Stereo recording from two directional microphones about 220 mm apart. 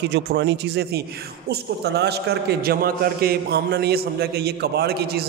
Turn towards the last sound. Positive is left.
turn(degrees=-45)  # may be behind; listen again after turning